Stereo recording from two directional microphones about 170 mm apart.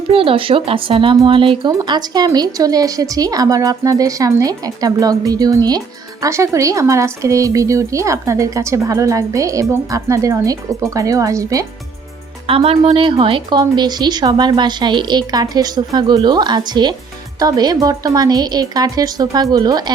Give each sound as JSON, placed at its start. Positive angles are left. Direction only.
{"t": 0.1, "sound": "speech", "side_deg": -30}
{"t": 12.5, "sound": "speech", "side_deg": -35}